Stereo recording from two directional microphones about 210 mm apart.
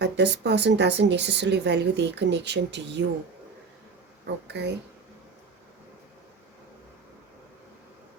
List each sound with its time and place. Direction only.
0.0 s a woman's voice: 55° right (ahead or behind)
4.4 s speech: 55° right (ahead or behind)